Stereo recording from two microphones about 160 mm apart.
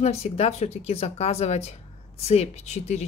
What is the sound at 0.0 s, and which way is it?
Speech, 40° left (ahead or behind).